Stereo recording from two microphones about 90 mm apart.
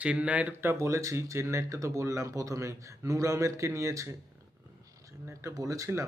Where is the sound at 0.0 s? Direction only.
15° right (ahead or behind); by 4.2 s 35° right (ahead or behind).